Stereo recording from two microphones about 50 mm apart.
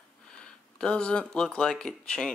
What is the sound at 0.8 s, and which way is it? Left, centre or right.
Speech, left.